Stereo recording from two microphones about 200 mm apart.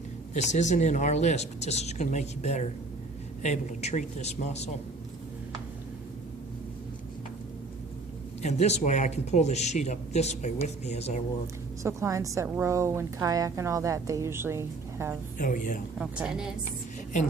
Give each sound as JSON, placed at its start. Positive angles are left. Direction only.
{"t": 0.3, "sound": "a man's voice", "side_deg": 35}
{"t": 8.4, "sound": "a man's voice", "side_deg": 35}
{"t": 11.8, "sound": "a woman's voice", "side_deg": -15}
{"t": 15.4, "sound": "a man's voice", "side_deg": 40}
{"t": 16.0, "sound": "a woman's voice", "side_deg": -5}